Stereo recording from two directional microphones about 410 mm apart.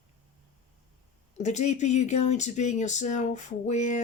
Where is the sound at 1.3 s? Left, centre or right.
Centre.